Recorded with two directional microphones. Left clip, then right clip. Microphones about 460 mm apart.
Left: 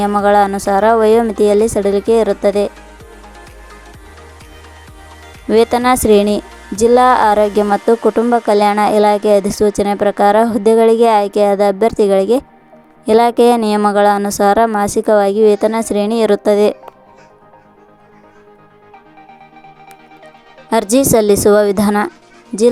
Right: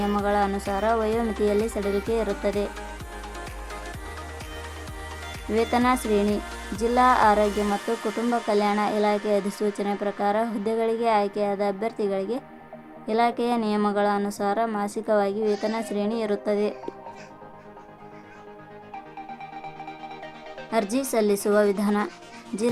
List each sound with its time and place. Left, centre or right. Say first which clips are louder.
0.0 s speech: left 13 dB; centre
3.3 s music: even; centre
5.5 s speech: left 11 dB; centre
20.7 s speech: left 14 dB; centre